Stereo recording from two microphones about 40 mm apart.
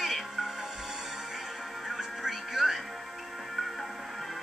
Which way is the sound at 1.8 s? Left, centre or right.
Centre.